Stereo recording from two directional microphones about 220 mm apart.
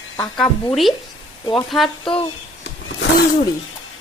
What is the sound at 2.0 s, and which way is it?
Speech, 25° left (ahead or behind).